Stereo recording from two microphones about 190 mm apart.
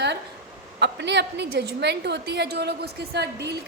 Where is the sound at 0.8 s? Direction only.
65° right (ahead or behind).